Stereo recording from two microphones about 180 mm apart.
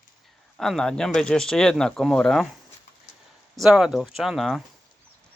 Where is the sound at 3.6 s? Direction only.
Centre (ahead or behind).